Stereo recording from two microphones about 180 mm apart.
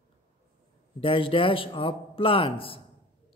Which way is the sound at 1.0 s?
30° left (ahead or behind).